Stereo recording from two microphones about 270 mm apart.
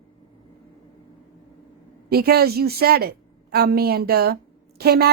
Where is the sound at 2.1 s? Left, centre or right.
Right.